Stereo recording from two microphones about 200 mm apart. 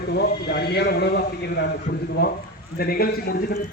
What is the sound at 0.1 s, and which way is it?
A man's voice, 55° left (ahead or behind).